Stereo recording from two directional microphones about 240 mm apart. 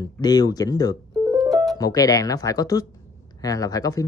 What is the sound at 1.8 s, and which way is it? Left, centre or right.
Speech, centre.